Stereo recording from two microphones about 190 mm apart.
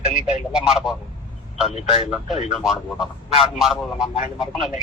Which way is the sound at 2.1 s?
Centre (ahead or behind).